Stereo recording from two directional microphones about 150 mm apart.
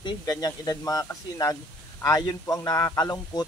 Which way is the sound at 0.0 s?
25° left (ahead or behind).